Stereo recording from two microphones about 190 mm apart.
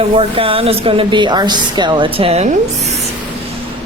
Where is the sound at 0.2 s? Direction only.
30° right (ahead or behind).